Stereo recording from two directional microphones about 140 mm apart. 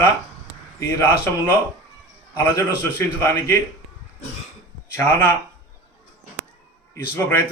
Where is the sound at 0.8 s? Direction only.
20° left (ahead or behind).